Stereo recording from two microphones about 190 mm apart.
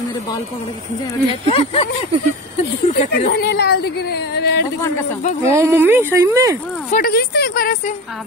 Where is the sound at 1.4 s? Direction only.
30° left (ahead or behind).